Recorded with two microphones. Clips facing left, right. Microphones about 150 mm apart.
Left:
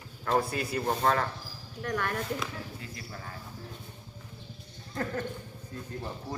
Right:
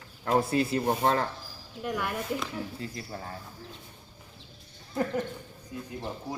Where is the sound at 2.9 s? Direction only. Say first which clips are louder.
Right 4 dB; 30° right (ahead or behind).